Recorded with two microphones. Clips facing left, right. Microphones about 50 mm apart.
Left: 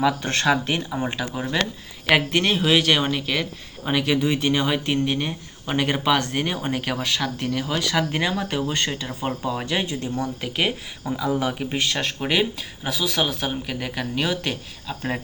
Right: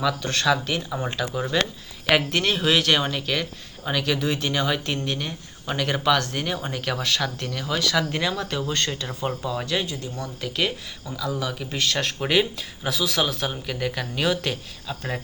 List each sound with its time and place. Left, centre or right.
0.0 s speech: left
0.9 s speech: centre
3.8 s speech: centre
11.9 s speech: centre